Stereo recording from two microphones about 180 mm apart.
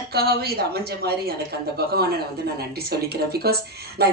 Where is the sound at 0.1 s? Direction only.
60° right (ahead or behind).